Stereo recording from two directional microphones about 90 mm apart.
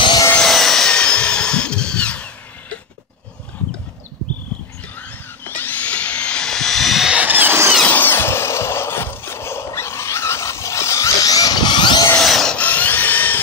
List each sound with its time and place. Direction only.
0.4 s drill: 5° left (ahead or behind)
4.9 s dental drill: 20° left (ahead or behind); by 7.2 s centre (ahead or behind)
7.2 s a sound: 20° right (ahead or behind)
7.8 s a sound: 20° left (ahead or behind); by 12.1 s 55° left (ahead or behind)
12.2 s wood: 5° left (ahead or behind)
12.5 s tools: 20° left (ahead or behind)